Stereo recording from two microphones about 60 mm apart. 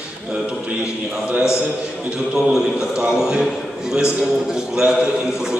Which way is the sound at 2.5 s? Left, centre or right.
Centre.